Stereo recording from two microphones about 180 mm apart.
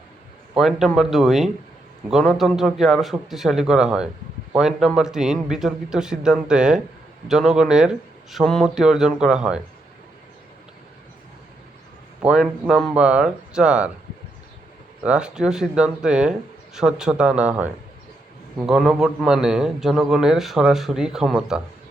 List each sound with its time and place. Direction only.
0.5 s a man's voice: centre (ahead or behind)
12.2 s a man's voice: 5° right (ahead or behind)
15.0 s a man's voice: 5° right (ahead or behind)